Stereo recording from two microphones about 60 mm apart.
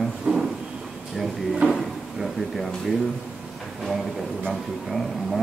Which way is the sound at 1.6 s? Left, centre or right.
Right.